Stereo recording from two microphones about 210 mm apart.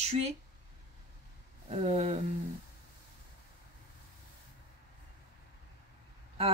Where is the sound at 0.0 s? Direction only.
30° right (ahead or behind).